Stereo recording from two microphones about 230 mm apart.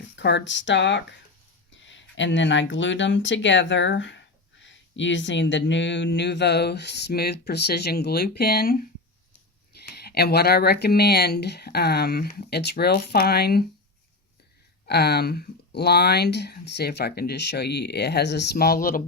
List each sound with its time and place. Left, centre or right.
0.2 s speech: left
14.8 s speech: left